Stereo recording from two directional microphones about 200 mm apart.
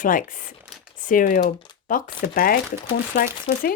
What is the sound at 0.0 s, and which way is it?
Speech, 40° left (ahead or behind).